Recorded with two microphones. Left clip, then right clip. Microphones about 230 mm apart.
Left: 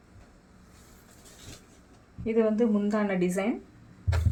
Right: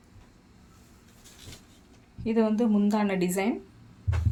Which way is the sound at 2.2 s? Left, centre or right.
Right.